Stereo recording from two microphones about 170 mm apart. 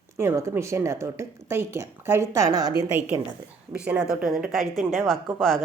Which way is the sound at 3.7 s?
5° right (ahead or behind).